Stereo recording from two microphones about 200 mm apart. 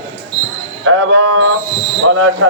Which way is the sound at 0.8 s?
85° right.